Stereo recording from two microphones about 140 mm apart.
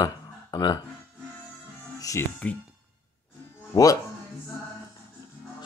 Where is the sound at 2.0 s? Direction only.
25° left (ahead or behind).